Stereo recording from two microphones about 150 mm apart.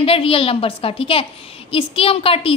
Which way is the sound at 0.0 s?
40° left (ahead or behind).